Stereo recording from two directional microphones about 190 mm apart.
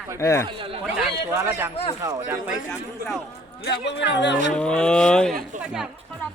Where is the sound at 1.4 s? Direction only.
10° right (ahead or behind).